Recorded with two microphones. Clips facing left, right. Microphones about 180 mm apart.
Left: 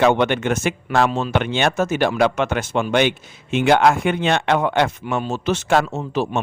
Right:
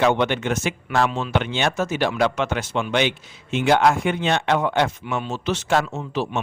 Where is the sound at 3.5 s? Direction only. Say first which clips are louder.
Left 2 dB; 60° left (ahead or behind).